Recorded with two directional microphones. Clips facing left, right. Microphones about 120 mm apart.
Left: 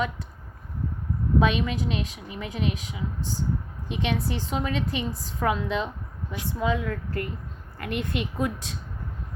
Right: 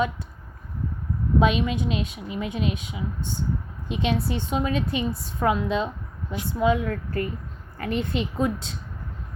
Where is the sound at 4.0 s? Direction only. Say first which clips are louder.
Right 2 dB; 25° right (ahead or behind).